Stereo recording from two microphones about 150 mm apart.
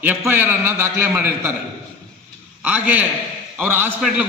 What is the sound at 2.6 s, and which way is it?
A man's voice, 10° right (ahead or behind).